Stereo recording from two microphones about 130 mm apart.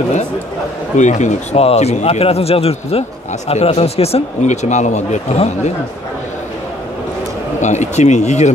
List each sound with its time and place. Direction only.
0.9 s speech: 65° left (ahead or behind)
7.6 s speech: 65° left (ahead or behind)